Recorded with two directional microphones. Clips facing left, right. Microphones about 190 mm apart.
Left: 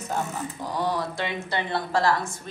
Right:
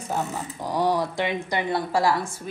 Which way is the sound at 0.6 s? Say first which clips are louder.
Right 5 dB; 15° right (ahead or behind).